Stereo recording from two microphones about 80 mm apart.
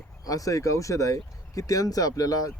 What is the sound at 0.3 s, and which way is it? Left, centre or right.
Speech, left.